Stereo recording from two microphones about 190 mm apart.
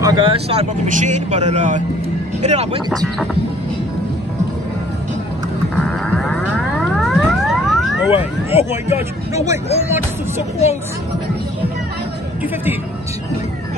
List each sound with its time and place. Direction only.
0.0 s speech: 25° right (ahead or behind)
0.8 s speech: 40° right (ahead or behind)
6.1 s music: centre (ahead or behind)
8.5 s speech: 35° left (ahead or behind)
9.3 s speech: 15° right (ahead or behind)